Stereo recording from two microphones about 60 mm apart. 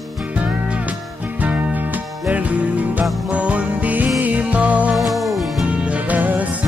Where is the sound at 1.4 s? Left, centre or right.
Right.